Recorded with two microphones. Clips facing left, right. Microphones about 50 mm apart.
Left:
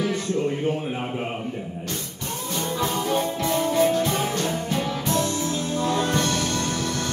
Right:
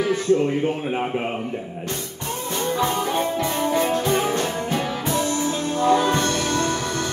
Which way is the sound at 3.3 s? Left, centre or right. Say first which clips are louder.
Even; centre.